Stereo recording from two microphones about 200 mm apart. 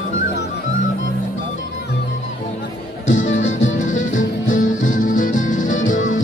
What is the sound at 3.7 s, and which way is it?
Music, 40° left (ahead or behind).